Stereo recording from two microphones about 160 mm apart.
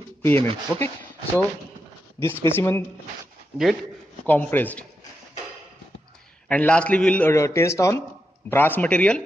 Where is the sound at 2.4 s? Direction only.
15° left (ahead or behind).